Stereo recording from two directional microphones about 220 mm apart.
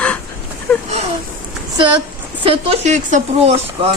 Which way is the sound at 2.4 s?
25° right (ahead or behind).